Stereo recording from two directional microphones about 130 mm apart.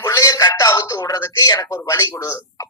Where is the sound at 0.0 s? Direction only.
25° left (ahead or behind).